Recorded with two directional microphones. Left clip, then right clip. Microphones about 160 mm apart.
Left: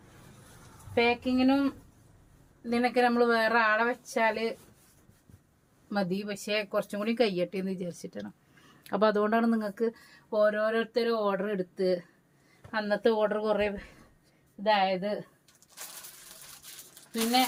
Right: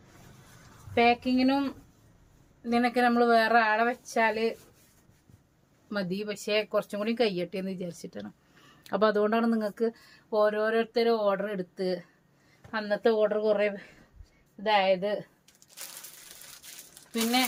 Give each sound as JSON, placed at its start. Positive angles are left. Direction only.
{"t": 0.9, "sound": "speech", "side_deg": -20}
{"t": 2.6, "sound": "speech", "side_deg": -20}
{"t": 5.9, "sound": "speech", "side_deg": -10}
{"t": 14.6, "sound": "speech", "side_deg": -20}